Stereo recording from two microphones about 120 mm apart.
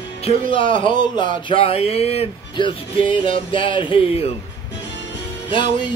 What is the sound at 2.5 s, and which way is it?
Speech, 45° left (ahead or behind).